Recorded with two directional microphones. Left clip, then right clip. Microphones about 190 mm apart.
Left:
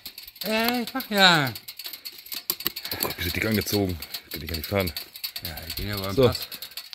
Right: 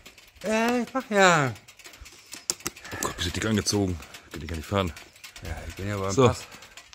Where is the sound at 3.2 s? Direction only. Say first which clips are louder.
Left 2 dB; 10° left (ahead or behind).